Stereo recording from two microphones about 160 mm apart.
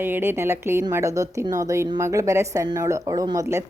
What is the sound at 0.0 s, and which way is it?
A woman's voice, 15° right (ahead or behind).